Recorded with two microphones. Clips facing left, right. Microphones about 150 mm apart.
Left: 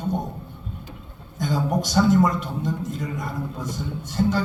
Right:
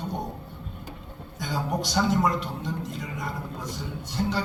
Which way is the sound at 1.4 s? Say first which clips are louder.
Left 5 dB; 45° left (ahead or behind).